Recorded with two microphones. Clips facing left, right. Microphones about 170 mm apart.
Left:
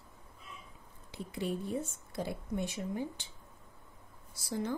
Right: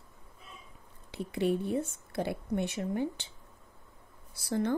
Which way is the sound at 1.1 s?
65° right (ahead or behind).